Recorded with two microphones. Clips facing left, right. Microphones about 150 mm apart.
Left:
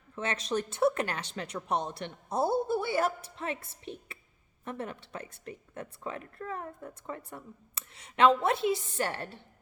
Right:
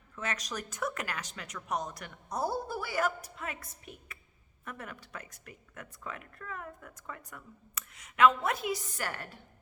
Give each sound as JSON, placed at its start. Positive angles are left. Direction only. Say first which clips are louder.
{"t": 0.2, "sound": "speech", "louder": "left 6 dB", "side_deg": 30}